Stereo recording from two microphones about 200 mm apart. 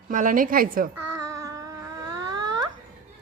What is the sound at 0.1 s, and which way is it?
Speech, 40° right (ahead or behind).